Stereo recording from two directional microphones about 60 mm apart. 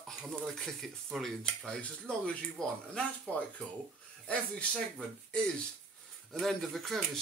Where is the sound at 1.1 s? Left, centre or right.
Centre.